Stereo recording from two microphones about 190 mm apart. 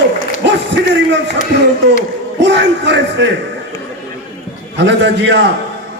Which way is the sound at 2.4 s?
65° right (ahead or behind).